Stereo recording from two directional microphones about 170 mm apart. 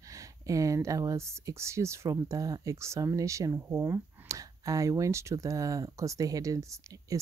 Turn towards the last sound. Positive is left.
turn(degrees=-20)  # may be behind; listen again after turning